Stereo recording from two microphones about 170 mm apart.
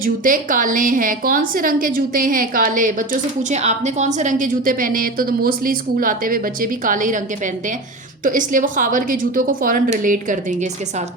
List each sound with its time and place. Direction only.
0.0 s a woman's voice: 50° right (ahead or behind)
8.2 s a woman's voice: 50° right (ahead or behind)